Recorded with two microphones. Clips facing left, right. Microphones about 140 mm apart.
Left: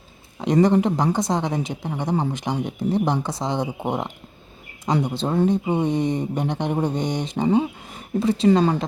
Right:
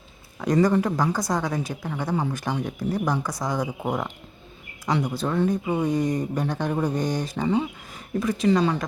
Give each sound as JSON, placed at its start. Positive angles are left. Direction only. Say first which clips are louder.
{"t": 0.3, "sound": "speech", "louder": "left 3 dB", "side_deg": 25}
{"t": 7.4, "sound": "speech", "louder": "left 5 dB", "side_deg": 35}